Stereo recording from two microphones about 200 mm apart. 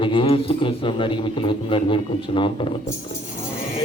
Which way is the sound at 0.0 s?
25° left (ahead or behind).